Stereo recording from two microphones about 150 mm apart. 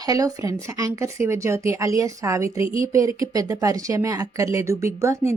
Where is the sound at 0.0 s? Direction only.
25° right (ahead or behind).